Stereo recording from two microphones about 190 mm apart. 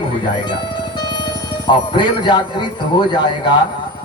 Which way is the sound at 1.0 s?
20° left (ahead or behind).